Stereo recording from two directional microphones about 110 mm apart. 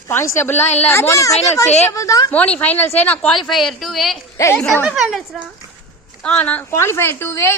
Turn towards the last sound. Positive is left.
turn(degrees=25)  # may be behind; listen again after turning